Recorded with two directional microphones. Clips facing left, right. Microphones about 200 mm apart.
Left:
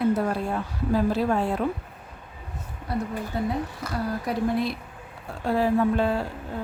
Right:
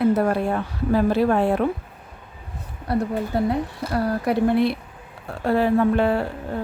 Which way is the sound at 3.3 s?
65° right (ahead or behind).